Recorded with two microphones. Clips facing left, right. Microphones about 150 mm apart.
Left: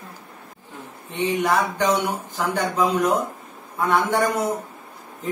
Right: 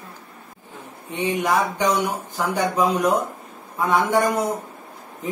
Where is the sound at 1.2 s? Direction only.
10° right (ahead or behind).